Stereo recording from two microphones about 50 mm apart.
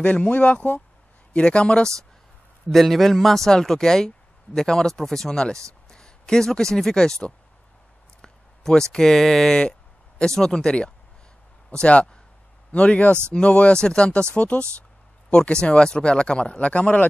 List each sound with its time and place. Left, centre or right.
0.0 s speech: left
2.7 s speech: centre
8.2 s a sound: centre
8.9 s speech: centre; by 17.0 s left